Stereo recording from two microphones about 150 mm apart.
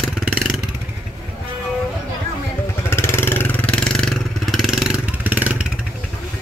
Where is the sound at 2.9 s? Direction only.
15° left (ahead or behind); by 5.6 s 10° right (ahead or behind).